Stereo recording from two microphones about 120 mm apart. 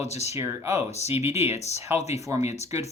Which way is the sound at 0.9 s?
65° left (ahead or behind).